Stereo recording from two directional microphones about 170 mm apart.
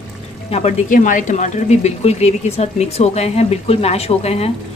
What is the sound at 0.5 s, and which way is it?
Speech, 40° left (ahead or behind).